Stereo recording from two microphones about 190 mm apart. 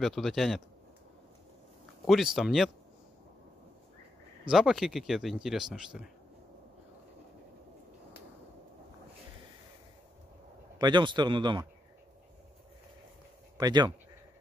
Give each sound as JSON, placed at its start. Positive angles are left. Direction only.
{"t": 0.0, "sound": "speech", "side_deg": 0}
{"t": 2.0, "sound": "speech", "side_deg": 0}
{"t": 4.5, "sound": "speech", "side_deg": -5}
{"t": 10.8, "sound": "speech", "side_deg": -25}
{"t": 13.6, "sound": "speech", "side_deg": -20}